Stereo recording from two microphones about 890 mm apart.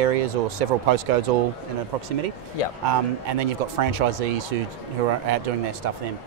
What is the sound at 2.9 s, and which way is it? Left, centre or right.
Speech, right.